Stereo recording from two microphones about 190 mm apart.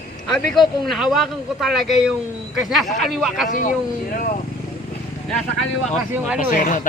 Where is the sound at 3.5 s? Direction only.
45° left (ahead or behind).